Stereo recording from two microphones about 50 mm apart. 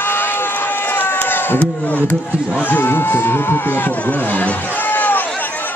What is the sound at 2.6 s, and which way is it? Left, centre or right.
Speech, left.